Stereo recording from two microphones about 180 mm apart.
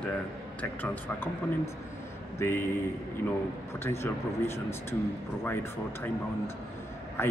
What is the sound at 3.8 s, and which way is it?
Speech, 15° left (ahead or behind).